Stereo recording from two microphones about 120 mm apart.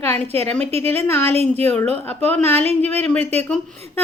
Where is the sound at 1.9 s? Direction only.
15° left (ahead or behind).